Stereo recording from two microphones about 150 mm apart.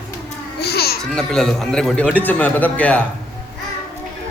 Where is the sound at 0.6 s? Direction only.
90° left.